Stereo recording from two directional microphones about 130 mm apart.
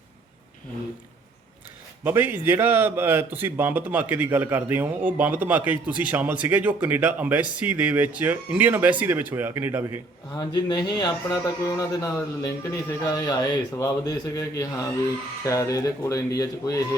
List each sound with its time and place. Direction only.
2.0 s a man's voice: 15° right (ahead or behind)
10.3 s speech: 30° left (ahead or behind)